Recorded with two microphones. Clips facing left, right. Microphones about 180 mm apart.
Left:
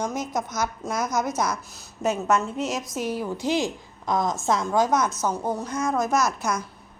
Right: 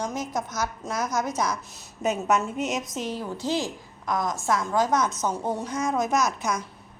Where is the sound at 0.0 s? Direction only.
10° right (ahead or behind).